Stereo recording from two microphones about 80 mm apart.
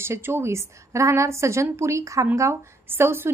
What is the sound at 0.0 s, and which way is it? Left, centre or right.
A woman's voice, right.